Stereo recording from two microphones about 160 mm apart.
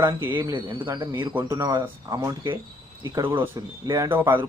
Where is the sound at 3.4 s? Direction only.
20° right (ahead or behind).